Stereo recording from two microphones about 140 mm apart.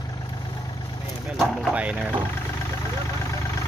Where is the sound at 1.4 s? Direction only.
5° left (ahead or behind).